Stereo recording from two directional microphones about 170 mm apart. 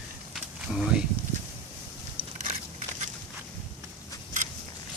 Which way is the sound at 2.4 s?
45° right (ahead or behind).